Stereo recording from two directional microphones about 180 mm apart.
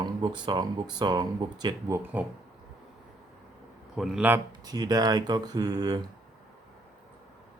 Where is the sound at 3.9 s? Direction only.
5° right (ahead or behind).